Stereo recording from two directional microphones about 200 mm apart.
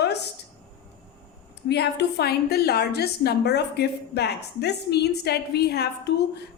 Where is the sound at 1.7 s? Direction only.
55° left (ahead or behind).